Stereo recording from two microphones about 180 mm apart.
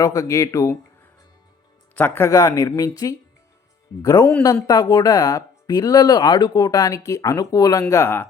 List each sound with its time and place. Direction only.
0.0 s speech: 20° left (ahead or behind)
2.0 s speech: 10° left (ahead or behind)
4.3 s speech: 10° left (ahead or behind)
4.6 s speech: 20° left (ahead or behind)